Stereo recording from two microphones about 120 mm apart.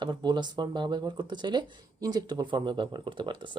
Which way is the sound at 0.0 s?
40° right (ahead or behind).